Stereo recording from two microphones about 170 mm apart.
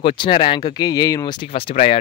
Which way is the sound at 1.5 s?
35° left (ahead or behind).